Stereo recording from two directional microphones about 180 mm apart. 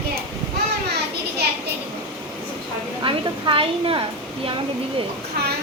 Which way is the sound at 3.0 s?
30° right (ahead or behind).